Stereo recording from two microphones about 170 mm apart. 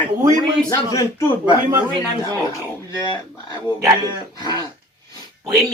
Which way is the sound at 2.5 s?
20° left (ahead or behind).